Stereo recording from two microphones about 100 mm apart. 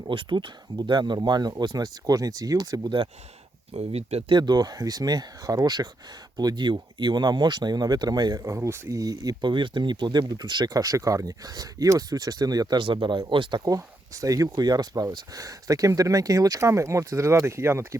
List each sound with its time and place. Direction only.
0.1 s speech: 55° right (ahead or behind); by 2.9 s 40° right (ahead or behind)
3.8 s speech: 90° right
4.3 s speech: 45° right (ahead or behind)
13.7 s speech: 35° right (ahead or behind)